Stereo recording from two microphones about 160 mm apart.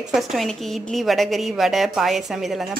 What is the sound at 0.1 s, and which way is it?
Speech, centre (ahead or behind).